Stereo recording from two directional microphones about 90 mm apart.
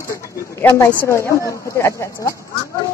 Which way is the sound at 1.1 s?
30° left (ahead or behind).